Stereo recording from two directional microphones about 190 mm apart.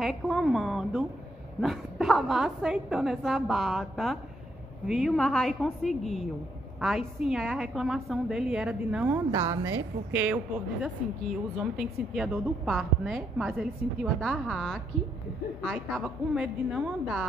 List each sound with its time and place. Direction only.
0.0 s a woman's voice: centre (ahead or behind)